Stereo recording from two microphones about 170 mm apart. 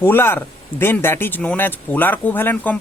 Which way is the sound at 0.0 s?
15° left (ahead or behind).